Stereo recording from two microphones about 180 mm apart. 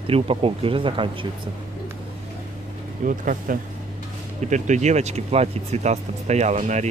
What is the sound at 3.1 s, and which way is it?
Speech, 50° right (ahead or behind).